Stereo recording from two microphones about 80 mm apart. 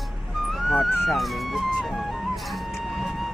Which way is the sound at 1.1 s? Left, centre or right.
Centre.